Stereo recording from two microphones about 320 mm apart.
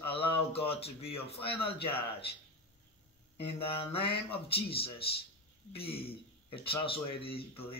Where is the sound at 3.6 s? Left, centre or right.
Centre.